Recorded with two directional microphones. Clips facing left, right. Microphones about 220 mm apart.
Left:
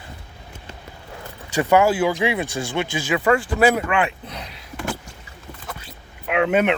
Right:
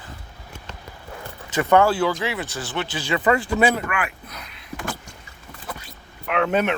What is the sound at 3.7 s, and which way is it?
Speech, 25° left (ahead or behind).